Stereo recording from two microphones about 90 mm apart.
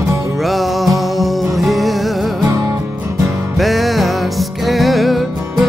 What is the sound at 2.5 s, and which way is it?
Music, 35° right (ahead or behind).